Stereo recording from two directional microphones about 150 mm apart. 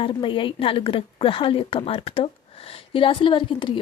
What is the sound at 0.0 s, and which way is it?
A woman's voice, 35° left (ahead or behind).